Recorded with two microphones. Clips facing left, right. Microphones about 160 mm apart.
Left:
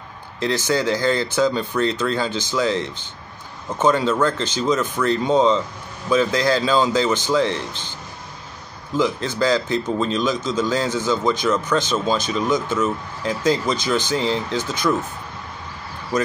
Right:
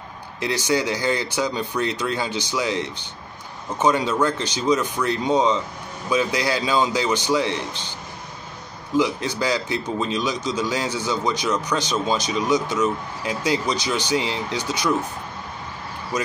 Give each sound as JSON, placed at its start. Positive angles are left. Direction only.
{"t": 0.4, "sound": "a man's voice", "side_deg": -15}
{"t": 8.9, "sound": "a man's voice", "side_deg": -15}